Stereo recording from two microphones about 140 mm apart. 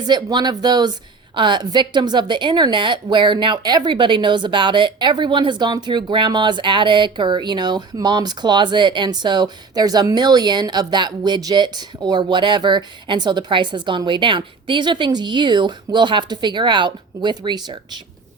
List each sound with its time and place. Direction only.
0.1 s a woman's voice: 30° right (ahead or behind)